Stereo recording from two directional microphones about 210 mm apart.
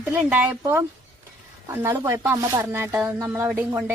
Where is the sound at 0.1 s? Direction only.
10° right (ahead or behind).